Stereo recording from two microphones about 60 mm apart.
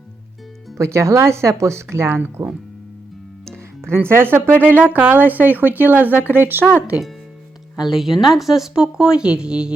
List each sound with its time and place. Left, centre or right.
0.8 s speech: right
3.8 s speech: right
7.8 s speech: centre